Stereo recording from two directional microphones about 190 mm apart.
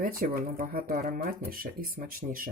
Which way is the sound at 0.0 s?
50° right (ahead or behind).